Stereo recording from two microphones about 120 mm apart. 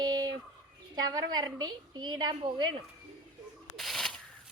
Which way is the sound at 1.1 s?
35° right (ahead or behind).